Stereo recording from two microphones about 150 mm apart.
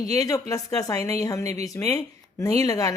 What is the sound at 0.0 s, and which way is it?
Speech, 25° left (ahead or behind).